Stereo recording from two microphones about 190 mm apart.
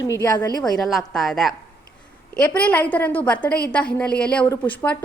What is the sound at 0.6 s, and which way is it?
Speech, centre (ahead or behind).